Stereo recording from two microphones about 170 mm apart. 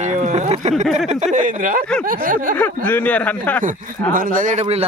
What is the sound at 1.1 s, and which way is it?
Speech, 45° right (ahead or behind).